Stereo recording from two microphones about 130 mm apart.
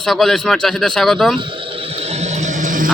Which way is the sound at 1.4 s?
40° right (ahead or behind).